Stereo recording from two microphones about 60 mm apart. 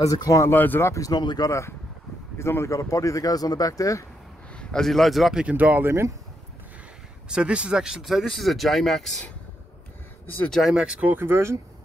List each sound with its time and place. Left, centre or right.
0.0 s speech: left
0.5 s speech: left
0.8 s speech: left
2.3 s speech: left
4.6 s a man's voice: centre
5.3 s speech: right
7.2 s speech: centre
10.7 s speech: centre
11.1 s speech: right